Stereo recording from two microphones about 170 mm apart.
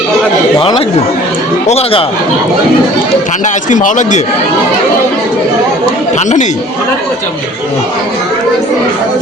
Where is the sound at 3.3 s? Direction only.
45° left (ahead or behind).